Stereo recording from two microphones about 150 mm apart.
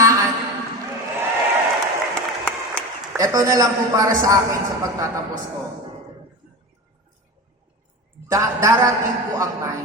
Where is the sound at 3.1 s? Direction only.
25° right (ahead or behind).